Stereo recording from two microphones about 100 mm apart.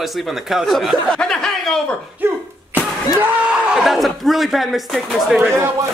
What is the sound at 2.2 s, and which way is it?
Cough, 20° right (ahead or behind).